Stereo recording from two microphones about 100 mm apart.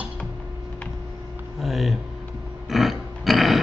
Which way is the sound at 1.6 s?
Centre (ahead or behind).